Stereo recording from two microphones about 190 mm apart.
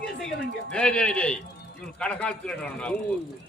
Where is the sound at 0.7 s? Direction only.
5° left (ahead or behind).